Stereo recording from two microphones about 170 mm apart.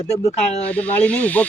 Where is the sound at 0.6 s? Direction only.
10° left (ahead or behind).